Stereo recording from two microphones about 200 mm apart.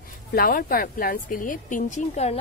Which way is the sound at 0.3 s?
45° left (ahead or behind).